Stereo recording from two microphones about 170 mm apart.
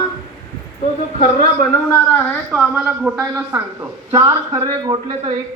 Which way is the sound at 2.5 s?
5° right (ahead or behind).